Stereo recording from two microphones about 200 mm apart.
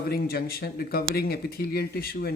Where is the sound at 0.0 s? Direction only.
50° left (ahead or behind).